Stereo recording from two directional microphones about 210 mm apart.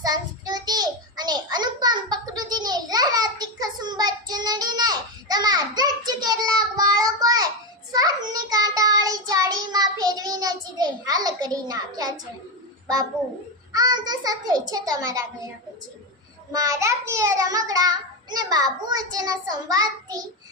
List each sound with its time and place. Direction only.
0.0 s child singing: 20° right (ahead or behind)
13.7 s a sound: 20° right (ahead or behind)
16.5 s a child's voice: 15° right (ahead or behind)